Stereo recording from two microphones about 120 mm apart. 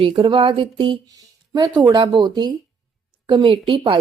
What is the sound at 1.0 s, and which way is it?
A woman's voice, 35° right (ahead or behind).